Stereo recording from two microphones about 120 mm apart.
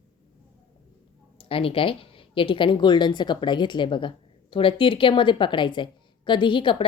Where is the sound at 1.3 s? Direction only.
50° left (ahead or behind).